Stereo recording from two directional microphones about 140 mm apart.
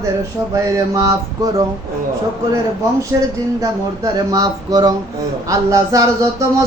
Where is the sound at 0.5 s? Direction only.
25° right (ahead or behind).